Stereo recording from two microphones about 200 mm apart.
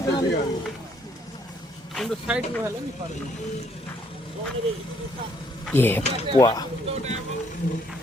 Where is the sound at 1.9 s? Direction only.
Centre (ahead or behind).